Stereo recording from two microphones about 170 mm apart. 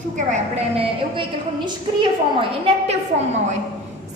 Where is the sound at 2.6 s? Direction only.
40° right (ahead or behind).